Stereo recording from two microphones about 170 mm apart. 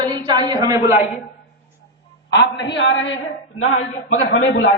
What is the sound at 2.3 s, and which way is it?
Speech, 90° left.